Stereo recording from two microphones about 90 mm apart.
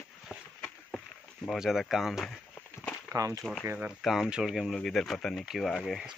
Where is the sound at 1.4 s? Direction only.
5° right (ahead or behind).